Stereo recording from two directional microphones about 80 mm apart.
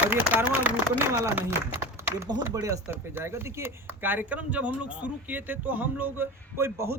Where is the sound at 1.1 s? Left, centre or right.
Right.